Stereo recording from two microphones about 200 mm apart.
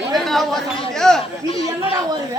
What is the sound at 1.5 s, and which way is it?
Speech, 25° left (ahead or behind).